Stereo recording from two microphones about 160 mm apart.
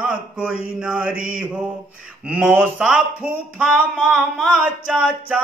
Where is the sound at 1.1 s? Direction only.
60° right (ahead or behind).